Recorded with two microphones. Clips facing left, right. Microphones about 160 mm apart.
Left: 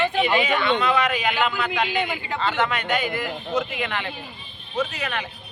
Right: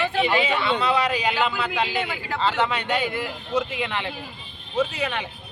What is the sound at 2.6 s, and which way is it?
Speech, 30° right (ahead or behind).